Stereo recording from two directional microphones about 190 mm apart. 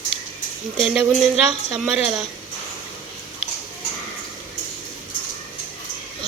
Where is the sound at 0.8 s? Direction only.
5° right (ahead or behind).